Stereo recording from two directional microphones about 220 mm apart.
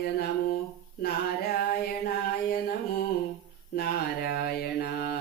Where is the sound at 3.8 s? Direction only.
45° left (ahead or behind).